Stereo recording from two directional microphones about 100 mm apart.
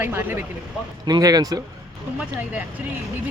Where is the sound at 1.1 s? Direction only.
40° right (ahead or behind).